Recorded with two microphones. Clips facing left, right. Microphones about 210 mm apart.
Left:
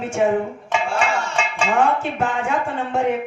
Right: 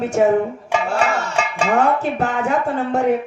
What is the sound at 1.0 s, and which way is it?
Music, 40° right (ahead or behind).